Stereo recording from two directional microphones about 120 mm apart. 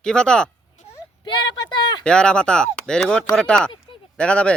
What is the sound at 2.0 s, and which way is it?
Speech, 5° left (ahead or behind).